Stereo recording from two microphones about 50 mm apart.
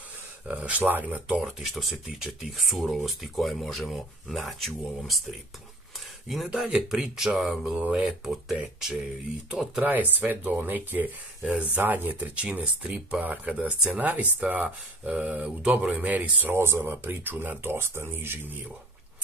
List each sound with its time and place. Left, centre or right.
0.5 s speech: right
1.4 s speech: centre
6.2 s speech: centre
9.8 s speech: right
11.4 s speech: right
11.8 s speech: right
12.4 s speech: right
16.5 s speech: right
17.0 s speech: right